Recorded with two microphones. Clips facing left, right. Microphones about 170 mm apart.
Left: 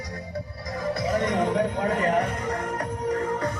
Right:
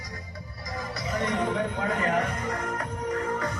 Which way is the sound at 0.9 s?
50° left (ahead or behind).